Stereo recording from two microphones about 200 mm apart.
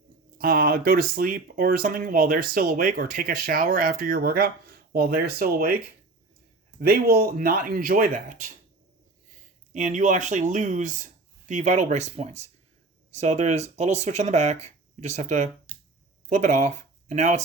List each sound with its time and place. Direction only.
0.3 s speech: 45° right (ahead or behind)
6.7 s speech: 50° right (ahead or behind)
9.7 s speech: 40° right (ahead or behind)